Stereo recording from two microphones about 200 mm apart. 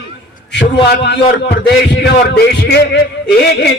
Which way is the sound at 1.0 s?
55° left (ahead or behind).